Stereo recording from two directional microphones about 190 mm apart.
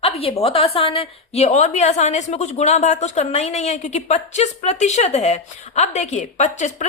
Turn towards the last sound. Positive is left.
turn(degrees=40)  # may be behind; listen again after turning